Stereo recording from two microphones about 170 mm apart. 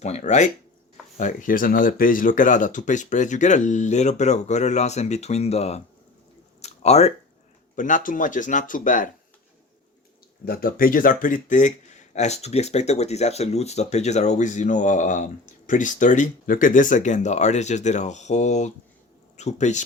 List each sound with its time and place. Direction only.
0.0 s speech: 40° left (ahead or behind)
6.6 s a sound: 40° left (ahead or behind)
7.8 s speech: 50° left (ahead or behind)
10.4 s speech: 60° left (ahead or behind); by 19.8 s 45° left (ahead or behind)